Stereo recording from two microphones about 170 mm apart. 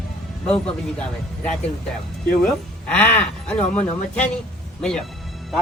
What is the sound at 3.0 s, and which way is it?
Speech, 10° left (ahead or behind).